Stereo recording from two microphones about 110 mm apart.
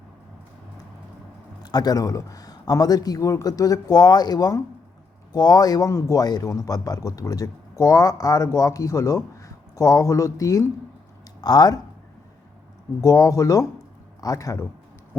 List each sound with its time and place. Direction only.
1.6 s speech: 40° left (ahead or behind)
13.0 s speech: 30° left (ahead or behind)